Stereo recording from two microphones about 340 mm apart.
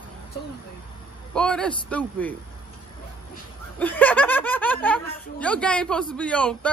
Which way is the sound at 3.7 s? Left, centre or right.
Centre.